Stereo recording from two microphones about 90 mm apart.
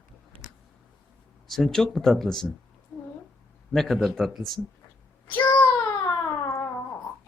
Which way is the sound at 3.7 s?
Centre (ahead or behind).